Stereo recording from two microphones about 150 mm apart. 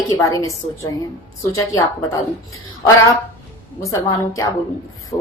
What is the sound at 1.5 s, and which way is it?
Speech, 25° left (ahead or behind).